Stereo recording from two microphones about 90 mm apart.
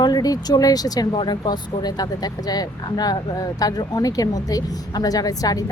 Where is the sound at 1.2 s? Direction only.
55° left (ahead or behind).